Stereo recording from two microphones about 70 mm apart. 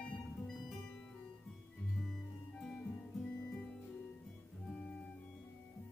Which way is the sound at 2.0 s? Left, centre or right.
Centre.